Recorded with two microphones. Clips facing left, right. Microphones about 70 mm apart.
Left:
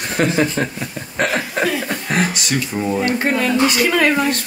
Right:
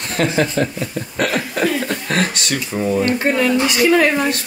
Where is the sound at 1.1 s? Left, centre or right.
Left.